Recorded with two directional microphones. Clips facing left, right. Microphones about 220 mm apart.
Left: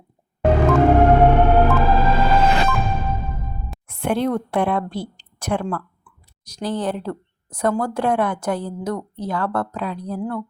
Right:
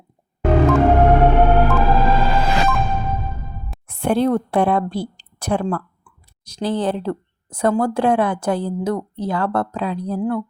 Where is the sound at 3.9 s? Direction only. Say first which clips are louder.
Right 3 dB; 35° right (ahead or behind).